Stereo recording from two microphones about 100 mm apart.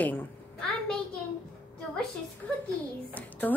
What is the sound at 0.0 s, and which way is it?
Speech, 20° left (ahead or behind).